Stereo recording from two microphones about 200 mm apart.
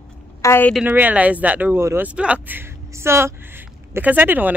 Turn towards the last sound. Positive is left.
turn(degrees=-10)  # may be behind; listen again after turning